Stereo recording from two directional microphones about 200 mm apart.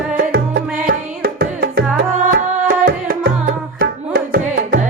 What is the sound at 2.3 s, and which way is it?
Tabla, 45° right (ahead or behind).